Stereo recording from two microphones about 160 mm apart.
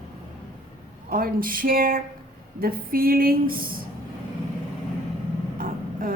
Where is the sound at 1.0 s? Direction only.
65° right (ahead or behind).